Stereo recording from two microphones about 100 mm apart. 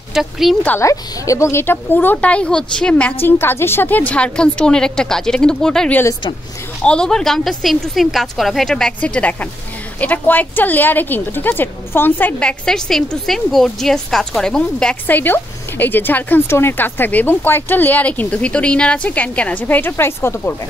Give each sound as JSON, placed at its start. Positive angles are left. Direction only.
{"t": 0.1, "sound": "a woman's voice", "side_deg": 0}
{"t": 0.7, "sound": "a woman's voice", "side_deg": 30}